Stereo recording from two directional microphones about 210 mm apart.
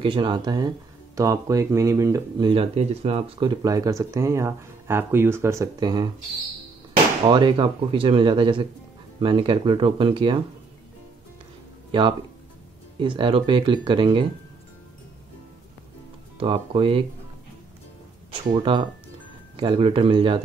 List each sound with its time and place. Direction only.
0.0 s speech: 20° right (ahead or behind)
7.2 s speech: 20° right (ahead or behind)
11.9 s speech: 25° right (ahead or behind)
16.3 s speech: 25° right (ahead or behind)
18.5 s speech: 20° right (ahead or behind)